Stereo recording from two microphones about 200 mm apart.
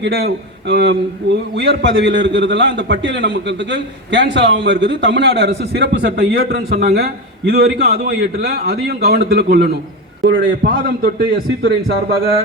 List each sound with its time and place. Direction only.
0.0 s a man's voice: 55° right (ahead or behind)